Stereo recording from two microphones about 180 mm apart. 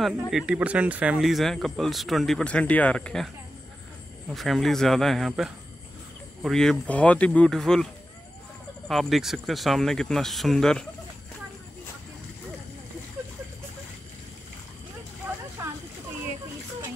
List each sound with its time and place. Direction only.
0.0 s speech: centre (ahead or behind)
4.3 s speech: centre (ahead or behind)